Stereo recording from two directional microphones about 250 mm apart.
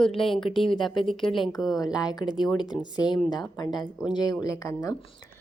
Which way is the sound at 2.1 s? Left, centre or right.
Centre.